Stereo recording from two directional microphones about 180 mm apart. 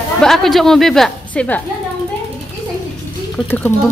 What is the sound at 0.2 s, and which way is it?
Speech, centre (ahead or behind).